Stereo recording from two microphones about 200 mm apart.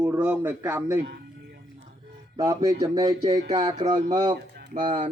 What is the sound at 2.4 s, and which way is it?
A man's voice, 20° right (ahead or behind).